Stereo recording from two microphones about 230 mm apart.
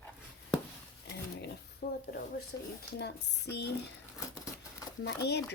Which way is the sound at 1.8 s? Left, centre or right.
Left.